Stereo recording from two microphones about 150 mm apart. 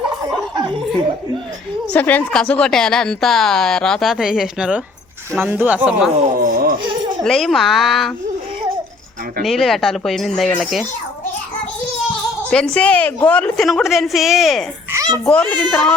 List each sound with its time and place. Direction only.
1.9 s a woman's voice: 10° left (ahead or behind); by 6.1 s 10° right (ahead or behind)
6.2 s speech: 70° right (ahead or behind)
7.3 s a woman's voice: centre (ahead or behind)
9.4 s a woman's voice: centre (ahead or behind)
12.4 s a woman's voice: 5° left (ahead or behind)